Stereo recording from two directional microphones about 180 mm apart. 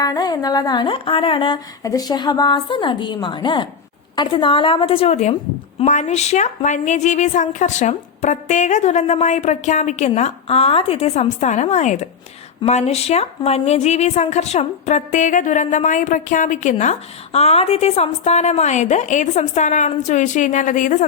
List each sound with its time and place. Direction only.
0.0 s a woman's voice: 20° left (ahead or behind); by 21.1 s 45° left (ahead or behind)